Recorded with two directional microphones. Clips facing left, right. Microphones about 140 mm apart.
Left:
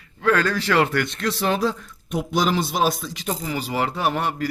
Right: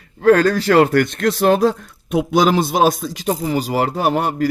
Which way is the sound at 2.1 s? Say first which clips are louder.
Right 7 dB; 90° right.